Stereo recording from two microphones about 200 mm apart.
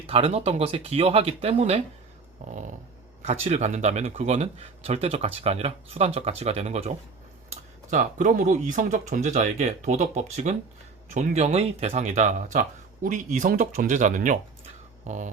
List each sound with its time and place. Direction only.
0.1 s speech: 30° right (ahead or behind)